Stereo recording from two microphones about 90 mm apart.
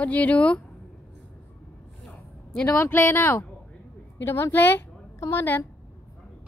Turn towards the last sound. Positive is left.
turn(degrees=25)  # may be behind; listen again after turning